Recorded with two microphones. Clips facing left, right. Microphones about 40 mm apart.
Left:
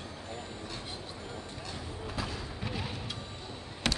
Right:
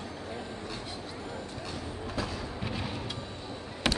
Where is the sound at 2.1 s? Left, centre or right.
Centre.